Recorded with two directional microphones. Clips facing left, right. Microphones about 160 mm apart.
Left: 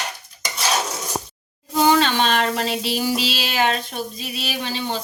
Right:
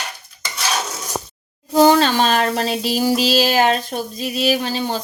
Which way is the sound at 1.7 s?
40° right (ahead or behind).